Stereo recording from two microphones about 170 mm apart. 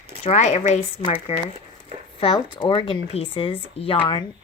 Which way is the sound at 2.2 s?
30° left (ahead or behind).